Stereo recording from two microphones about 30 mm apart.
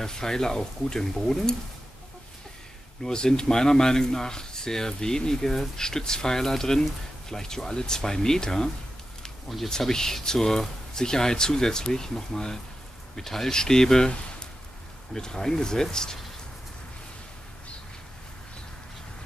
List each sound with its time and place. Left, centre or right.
0.0 s speech: centre
3.0 s speech: left
9.7 s speech: centre
15.1 s speech: centre